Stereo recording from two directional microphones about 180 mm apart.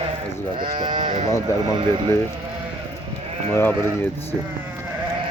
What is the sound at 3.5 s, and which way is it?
Speech, 15° left (ahead or behind).